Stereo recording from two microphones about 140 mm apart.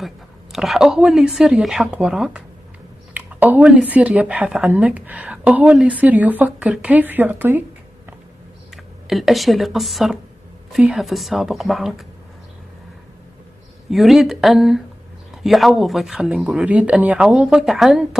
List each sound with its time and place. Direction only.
0.0 s a woman's voice: centre (ahead or behind)
9.0 s speech: centre (ahead or behind)
13.8 s speech: centre (ahead or behind)